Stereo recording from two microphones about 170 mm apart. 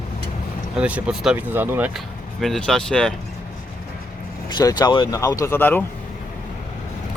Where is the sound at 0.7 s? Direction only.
5° right (ahead or behind).